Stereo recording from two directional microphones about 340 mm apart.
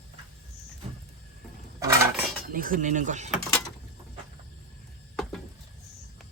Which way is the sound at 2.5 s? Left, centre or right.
Right.